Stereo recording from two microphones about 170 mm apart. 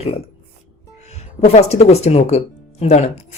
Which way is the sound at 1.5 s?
40° left (ahead or behind).